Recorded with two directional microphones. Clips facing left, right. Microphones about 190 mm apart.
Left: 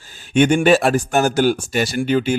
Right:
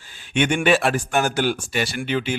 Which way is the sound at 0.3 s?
40° left (ahead or behind).